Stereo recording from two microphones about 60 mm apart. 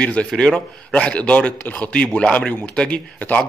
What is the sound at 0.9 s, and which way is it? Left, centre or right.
A man's voice, left.